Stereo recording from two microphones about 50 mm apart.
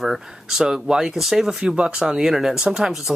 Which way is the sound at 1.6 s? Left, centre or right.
Right.